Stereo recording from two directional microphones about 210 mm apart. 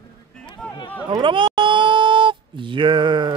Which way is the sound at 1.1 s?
25° right (ahead or behind).